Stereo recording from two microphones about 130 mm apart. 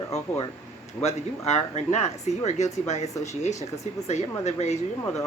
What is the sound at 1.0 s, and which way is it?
Speech, 60° left (ahead or behind).